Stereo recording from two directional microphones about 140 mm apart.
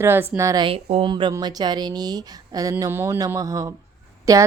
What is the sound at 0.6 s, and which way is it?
A woman's voice, 40° right (ahead or behind).